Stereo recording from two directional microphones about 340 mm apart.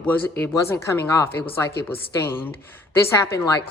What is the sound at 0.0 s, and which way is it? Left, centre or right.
Speech, centre.